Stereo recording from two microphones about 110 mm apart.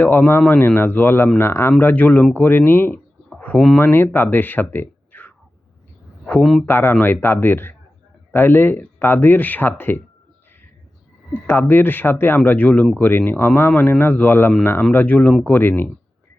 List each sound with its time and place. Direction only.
0.0 s speech: 15° left (ahead or behind)
3.3 s bird: 15° left (ahead or behind)
3.8 s speech: 20° left (ahead or behind)
6.4 s speech: centre (ahead or behind)
6.7 s speech: 20° left (ahead or behind)
11.4 s speech: 20° left (ahead or behind)